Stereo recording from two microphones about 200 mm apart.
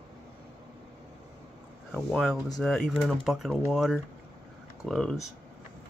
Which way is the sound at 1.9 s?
Centre (ahead or behind).